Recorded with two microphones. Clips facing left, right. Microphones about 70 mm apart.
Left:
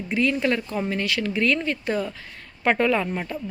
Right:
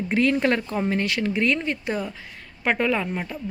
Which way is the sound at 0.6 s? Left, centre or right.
Right.